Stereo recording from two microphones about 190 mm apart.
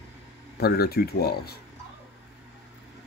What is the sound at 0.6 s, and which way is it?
Speech, 55° left (ahead or behind).